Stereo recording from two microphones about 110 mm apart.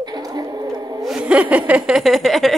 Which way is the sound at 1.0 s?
5° right (ahead or behind).